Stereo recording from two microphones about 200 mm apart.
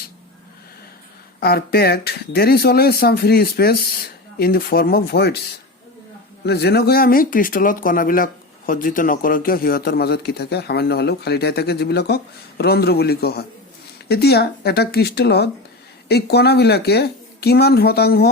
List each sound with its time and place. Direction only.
1.4 s speech: 50° left (ahead or behind)
6.4 s speech: 55° left (ahead or behind)